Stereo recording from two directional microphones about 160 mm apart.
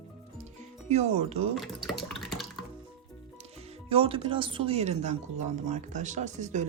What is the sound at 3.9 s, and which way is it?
Speech, 35° right (ahead or behind).